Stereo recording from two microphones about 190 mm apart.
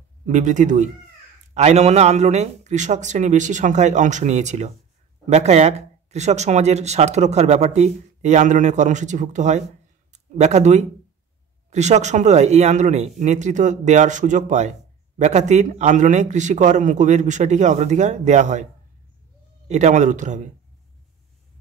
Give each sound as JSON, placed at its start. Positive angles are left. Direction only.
{"t": 0.3, "sound": "speech", "side_deg": -40}
{"t": 19.7, "sound": "speech", "side_deg": -40}